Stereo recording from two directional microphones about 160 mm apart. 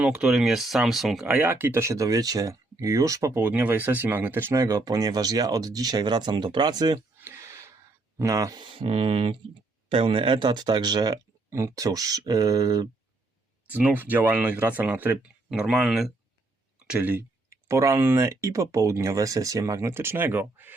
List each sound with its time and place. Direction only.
0.0 s speech: 5° right (ahead or behind); by 7.0 s 25° right (ahead or behind)
7.2 s a sound: 15° right (ahead or behind)
8.2 s speech: 20° right (ahead or behind)
13.7 s speech: 10° right (ahead or behind)